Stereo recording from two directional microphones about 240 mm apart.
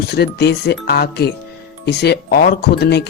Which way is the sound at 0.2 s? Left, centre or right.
Left.